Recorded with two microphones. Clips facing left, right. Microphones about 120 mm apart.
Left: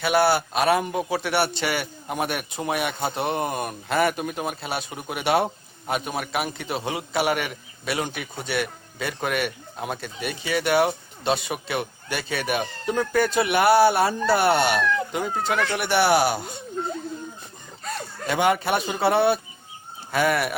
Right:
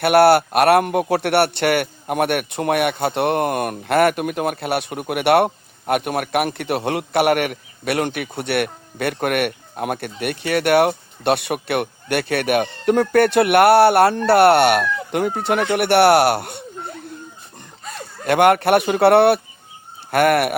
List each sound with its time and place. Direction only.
0.0 s a man's voice: 65° right (ahead or behind)
18.3 s a man's voice: 60° right (ahead or behind)